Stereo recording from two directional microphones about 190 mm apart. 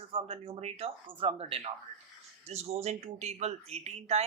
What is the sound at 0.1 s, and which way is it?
Speech, 30° right (ahead or behind).